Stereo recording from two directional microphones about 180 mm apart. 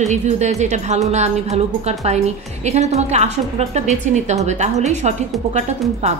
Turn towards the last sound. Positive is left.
turn(degrees=-40)  # may be behind; listen again after turning